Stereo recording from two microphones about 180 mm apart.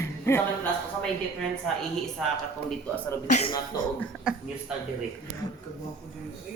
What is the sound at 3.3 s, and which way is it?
Speech, 35° left (ahead or behind).